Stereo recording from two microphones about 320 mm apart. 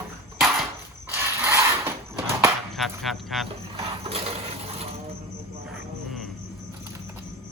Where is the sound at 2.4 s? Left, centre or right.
Centre.